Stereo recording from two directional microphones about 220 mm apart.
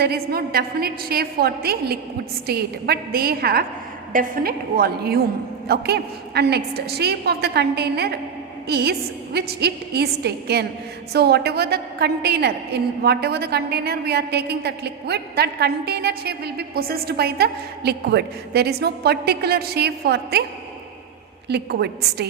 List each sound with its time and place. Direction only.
0.0 s a woman's voice: 45° right (ahead or behind)
21.4 s a woman's voice: 50° right (ahead or behind)